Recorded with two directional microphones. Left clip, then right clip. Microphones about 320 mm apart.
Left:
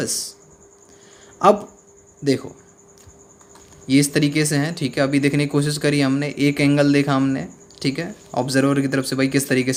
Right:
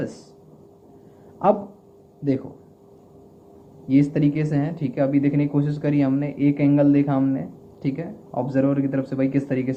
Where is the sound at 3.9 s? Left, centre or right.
Left.